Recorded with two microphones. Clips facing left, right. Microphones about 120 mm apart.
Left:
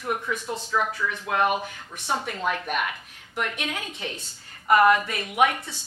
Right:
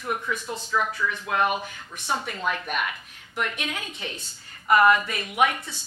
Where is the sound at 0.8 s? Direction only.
40° left (ahead or behind).